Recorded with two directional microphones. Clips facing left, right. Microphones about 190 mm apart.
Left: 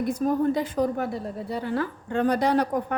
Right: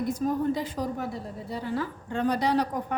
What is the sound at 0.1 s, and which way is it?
A woman's voice, 55° left (ahead or behind).